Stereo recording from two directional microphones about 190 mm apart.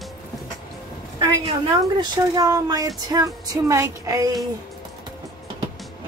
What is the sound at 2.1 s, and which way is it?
Speech, 20° right (ahead or behind).